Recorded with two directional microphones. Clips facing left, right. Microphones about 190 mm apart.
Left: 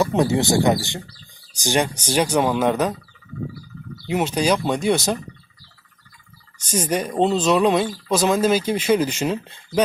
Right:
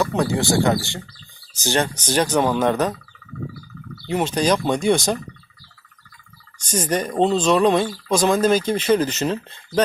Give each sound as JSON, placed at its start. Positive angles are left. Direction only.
{"t": 0.0, "sound": "speech", "side_deg": 20}
{"t": 4.0, "sound": "speech", "side_deg": 10}
{"t": 6.7, "sound": "speech", "side_deg": 10}